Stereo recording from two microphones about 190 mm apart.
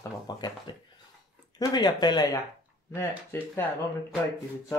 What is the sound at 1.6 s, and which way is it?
Speech, 20° left (ahead or behind).